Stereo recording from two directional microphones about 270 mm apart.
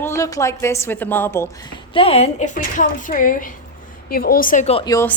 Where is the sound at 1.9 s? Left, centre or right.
Left.